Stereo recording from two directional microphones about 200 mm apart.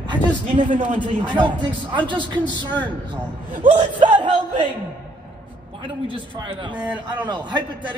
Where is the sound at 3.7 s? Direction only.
30° right (ahead or behind).